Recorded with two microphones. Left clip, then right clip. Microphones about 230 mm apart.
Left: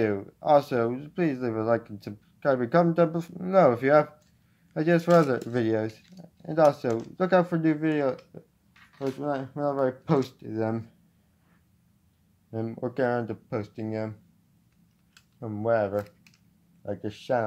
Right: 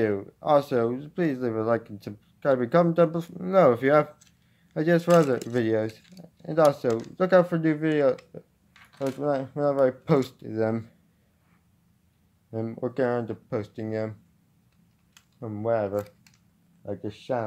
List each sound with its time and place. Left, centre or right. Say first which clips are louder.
0.0 s speech: right 1 dB; centre
12.4 s speech: right 1 dB; centre
15.3 s speech: left 1 dB; centre